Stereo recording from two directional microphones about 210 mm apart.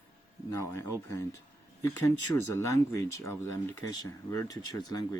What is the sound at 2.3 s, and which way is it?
Speech, 15° left (ahead or behind).